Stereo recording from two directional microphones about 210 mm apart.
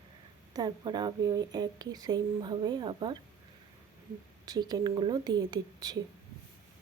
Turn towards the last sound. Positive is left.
turn(degrees=-20)  # may be behind; listen again after turning